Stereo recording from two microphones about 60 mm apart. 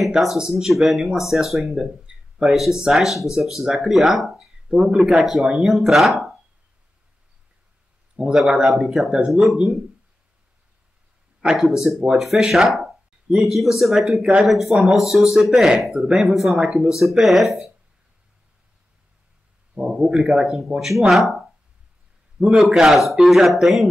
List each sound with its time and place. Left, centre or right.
0.0 s speech: centre
4.6 s speech: centre
4.9 s speech: centre
8.2 s speech: centre
11.4 s speech: centre
19.7 s a sound: centre
20.0 s speech: centre
22.6 s speech: centre